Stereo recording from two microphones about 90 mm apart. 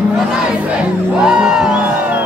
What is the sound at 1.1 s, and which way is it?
Music, 10° right (ahead or behind).